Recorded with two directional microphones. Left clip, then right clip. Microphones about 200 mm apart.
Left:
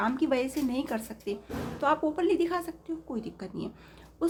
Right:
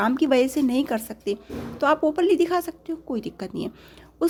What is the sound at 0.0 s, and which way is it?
A woman's voice, 40° right (ahead or behind).